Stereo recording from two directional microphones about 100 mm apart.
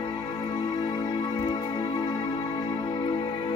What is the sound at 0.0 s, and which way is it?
Music, 50° left (ahead or behind).